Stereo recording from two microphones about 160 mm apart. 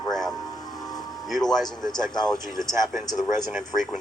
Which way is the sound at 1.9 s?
25° left (ahead or behind).